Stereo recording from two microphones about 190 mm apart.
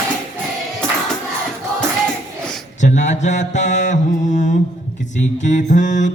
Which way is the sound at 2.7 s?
40° left (ahead or behind).